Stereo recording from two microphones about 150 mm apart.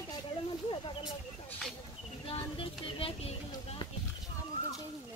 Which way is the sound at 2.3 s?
35° left (ahead or behind).